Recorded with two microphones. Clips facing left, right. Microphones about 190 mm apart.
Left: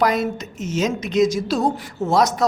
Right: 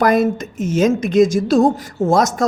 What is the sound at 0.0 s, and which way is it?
A woman's voice, 50° right (ahead or behind).